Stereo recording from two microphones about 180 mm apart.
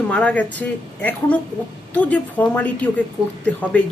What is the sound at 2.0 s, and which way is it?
A woman's voice, 10° left (ahead or behind).